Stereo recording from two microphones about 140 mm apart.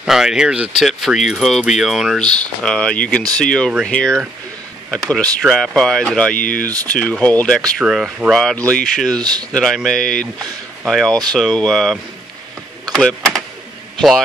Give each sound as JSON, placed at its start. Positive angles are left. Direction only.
{"t": 0.0, "sound": "speech", "side_deg": -5}
{"t": 6.3, "sound": "speech", "side_deg": 75}
{"t": 6.9, "sound": "speech", "side_deg": 10}
{"t": 7.8, "sound": "speech", "side_deg": -5}
{"t": 9.2, "sound": "speech", "side_deg": -30}
{"t": 9.5, "sound": "speech", "side_deg": 0}